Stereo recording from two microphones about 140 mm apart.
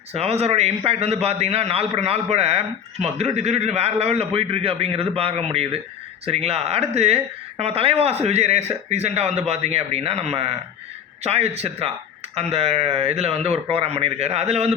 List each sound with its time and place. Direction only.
0.1 s a man's voice: 50° right (ahead or behind)